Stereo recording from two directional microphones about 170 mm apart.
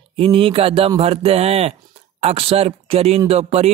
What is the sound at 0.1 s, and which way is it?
Speech, 30° right (ahead or behind).